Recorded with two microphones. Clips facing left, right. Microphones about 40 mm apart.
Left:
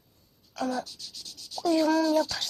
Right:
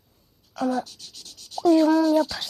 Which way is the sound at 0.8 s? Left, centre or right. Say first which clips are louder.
Right 3 dB; right.